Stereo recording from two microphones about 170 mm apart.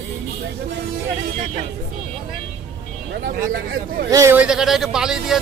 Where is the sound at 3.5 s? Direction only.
60° right (ahead or behind).